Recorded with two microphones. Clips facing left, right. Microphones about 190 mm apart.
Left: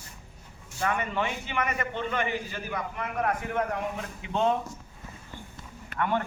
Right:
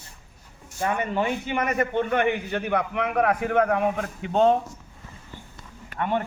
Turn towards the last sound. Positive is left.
turn(degrees=-20)  # may be behind; listen again after turning